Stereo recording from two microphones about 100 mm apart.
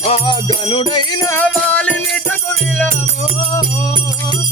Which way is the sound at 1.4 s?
15° left (ahead or behind).